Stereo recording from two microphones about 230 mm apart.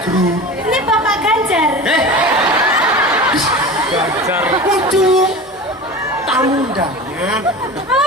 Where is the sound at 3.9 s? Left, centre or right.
Centre.